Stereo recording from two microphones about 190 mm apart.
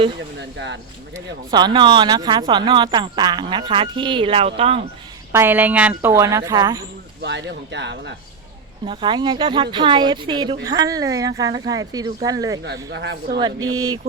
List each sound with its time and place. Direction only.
0.3 s speech: 65° right (ahead or behind)
1.1 s speech: 20° right (ahead or behind)
5.3 s speech: 10° right (ahead or behind)
7.2 s speech: 65° right (ahead or behind)
8.8 s speech: 25° right (ahead or behind)
12.6 s speech: 65° right (ahead or behind)
13.7 s speech: 20° right (ahead or behind)